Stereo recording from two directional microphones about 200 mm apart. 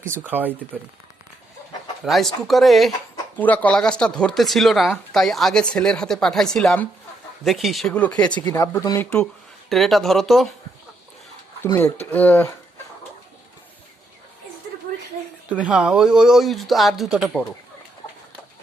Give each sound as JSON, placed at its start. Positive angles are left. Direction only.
{"t": 0.0, "sound": "speech", "side_deg": -10}
{"t": 2.0, "sound": "speech", "side_deg": 0}
{"t": 9.6, "sound": "speech", "side_deg": 0}
{"t": 11.6, "sound": "speech", "side_deg": 10}
{"t": 15.4, "sound": "speech", "side_deg": -5}